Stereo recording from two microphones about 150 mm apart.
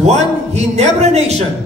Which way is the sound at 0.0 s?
45° right (ahead or behind).